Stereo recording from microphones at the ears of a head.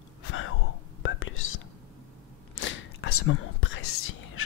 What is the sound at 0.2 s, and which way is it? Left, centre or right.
Whispering, left.